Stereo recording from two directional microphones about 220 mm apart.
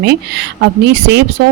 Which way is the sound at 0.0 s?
45° right (ahead or behind).